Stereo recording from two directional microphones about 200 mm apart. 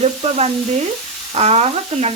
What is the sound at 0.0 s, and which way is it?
Frying, 30° right (ahead or behind).